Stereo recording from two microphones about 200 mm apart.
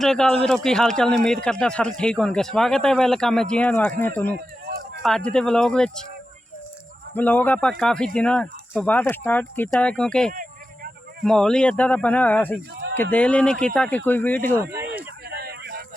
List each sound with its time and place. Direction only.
0.0 s speech: 5° left (ahead or behind)
5.0 s speech: 5° left (ahead or behind)
7.1 s a man's voice: 10° left (ahead or behind)
14.6 s speech: 15° right (ahead or behind)
15.3 s a sound: 50° right (ahead or behind)